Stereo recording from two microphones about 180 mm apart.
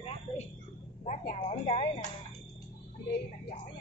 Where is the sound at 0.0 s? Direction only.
40° left (ahead or behind).